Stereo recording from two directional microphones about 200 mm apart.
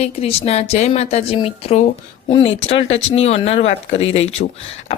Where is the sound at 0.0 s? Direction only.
30° left (ahead or behind).